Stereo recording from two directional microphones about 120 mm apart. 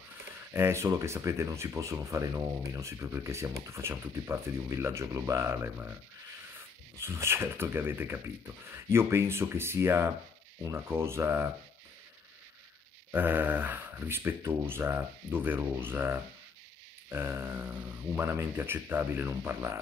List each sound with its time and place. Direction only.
0.5 s speech: 20° right (ahead or behind)
7.0 s speech: 20° right (ahead or behind)
13.1 s speech: 15° right (ahead or behind)